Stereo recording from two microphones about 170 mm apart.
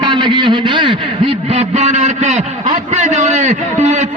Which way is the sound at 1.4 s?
40° right (ahead or behind).